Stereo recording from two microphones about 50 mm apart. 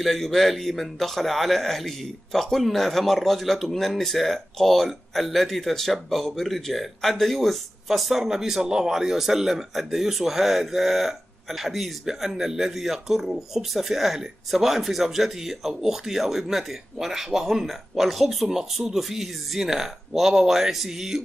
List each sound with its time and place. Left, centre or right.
0.0 s a man's voice: centre